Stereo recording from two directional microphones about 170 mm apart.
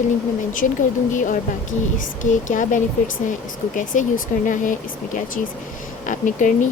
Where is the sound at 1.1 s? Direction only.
50° left (ahead or behind).